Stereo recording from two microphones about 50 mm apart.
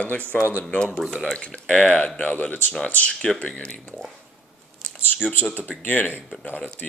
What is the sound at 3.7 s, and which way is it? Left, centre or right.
Speech, left.